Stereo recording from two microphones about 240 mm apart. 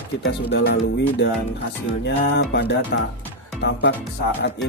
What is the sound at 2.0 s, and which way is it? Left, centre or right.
Speech, left.